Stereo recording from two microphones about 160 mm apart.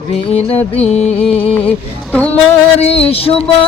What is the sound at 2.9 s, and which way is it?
Music, 35° left (ahead or behind).